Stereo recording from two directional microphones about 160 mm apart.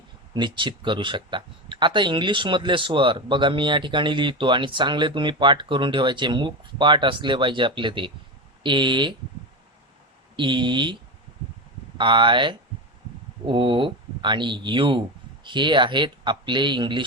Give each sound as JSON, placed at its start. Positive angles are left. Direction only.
{"t": 0.3, "sound": "speech", "side_deg": -30}
{"t": 10.3, "sound": "speech", "side_deg": -30}
{"t": 11.9, "sound": "speech", "side_deg": -30}